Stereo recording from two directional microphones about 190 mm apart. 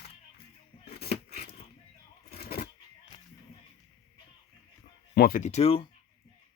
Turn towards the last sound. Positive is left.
turn(degrees=30)  # may be behind; listen again after turning